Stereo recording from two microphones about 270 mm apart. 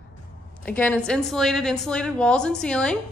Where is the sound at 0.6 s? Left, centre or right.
Centre.